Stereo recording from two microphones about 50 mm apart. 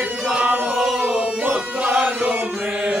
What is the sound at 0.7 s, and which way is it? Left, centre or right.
Music, centre.